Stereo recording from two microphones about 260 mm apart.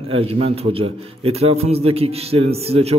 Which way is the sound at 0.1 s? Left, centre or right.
Right.